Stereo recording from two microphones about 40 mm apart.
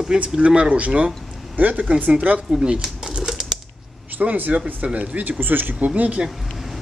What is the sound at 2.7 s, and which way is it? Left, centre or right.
Pigeon, right.